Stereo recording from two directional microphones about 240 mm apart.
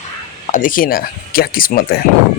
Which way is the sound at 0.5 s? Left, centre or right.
Left.